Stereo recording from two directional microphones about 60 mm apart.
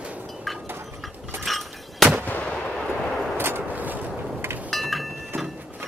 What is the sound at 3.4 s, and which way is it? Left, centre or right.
Artillery fire, right.